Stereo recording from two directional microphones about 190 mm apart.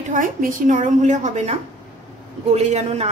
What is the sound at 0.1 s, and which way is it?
A woman's voice, 45° right (ahead or behind).